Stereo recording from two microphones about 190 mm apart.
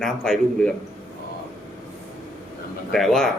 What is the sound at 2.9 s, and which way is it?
Speech, centre (ahead or behind).